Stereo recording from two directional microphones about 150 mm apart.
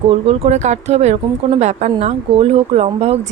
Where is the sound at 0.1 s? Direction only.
45° right (ahead or behind).